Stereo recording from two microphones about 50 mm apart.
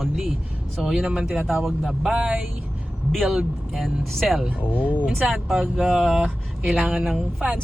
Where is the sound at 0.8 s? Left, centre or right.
Centre.